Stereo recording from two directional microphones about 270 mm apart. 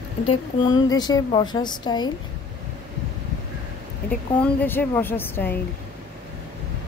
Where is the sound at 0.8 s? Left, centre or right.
Centre.